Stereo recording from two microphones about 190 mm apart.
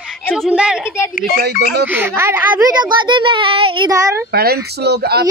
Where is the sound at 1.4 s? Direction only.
60° right (ahead or behind).